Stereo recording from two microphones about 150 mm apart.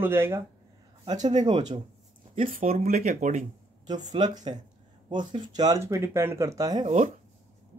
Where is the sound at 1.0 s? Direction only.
30° right (ahead or behind).